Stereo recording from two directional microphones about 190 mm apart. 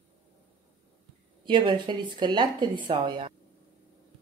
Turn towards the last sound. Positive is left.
turn(degrees=-25)  # may be behind; listen again after turning